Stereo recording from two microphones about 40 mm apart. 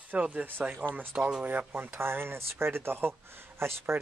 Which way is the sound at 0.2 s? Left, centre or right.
Right.